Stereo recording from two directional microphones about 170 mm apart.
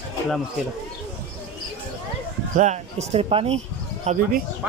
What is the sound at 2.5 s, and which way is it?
Speech, 45° right (ahead or behind).